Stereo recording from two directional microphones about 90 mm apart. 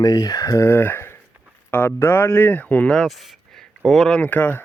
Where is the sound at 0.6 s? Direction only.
20° left (ahead or behind); by 4.1 s centre (ahead or behind).